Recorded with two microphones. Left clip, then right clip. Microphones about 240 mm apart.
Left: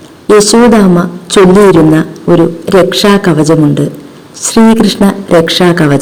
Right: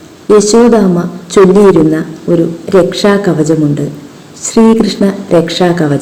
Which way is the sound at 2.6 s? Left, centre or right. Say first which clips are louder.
Left 2 dB; left.